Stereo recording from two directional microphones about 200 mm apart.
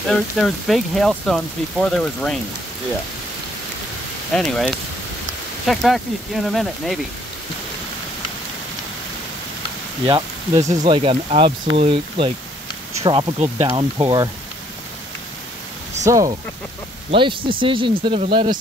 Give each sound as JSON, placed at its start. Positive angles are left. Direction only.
{"t": 0.1, "sound": "speech", "side_deg": 0}
{"t": 4.3, "sound": "speech", "side_deg": 0}
{"t": 10.0, "sound": "speech", "side_deg": -20}
{"t": 17.1, "sound": "speech", "side_deg": -25}